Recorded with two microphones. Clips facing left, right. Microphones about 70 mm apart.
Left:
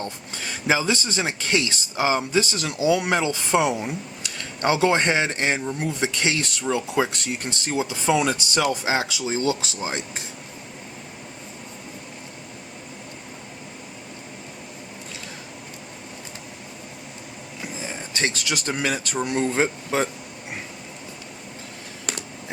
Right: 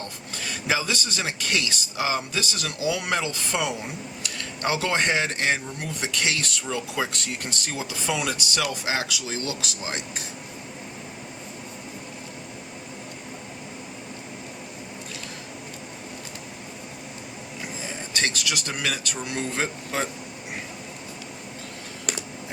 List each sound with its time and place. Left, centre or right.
0.7 s speech: left
18.1 s speech: left